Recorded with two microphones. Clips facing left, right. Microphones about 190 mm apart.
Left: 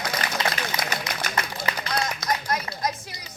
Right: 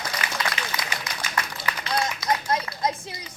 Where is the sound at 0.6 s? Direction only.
40° left (ahead or behind).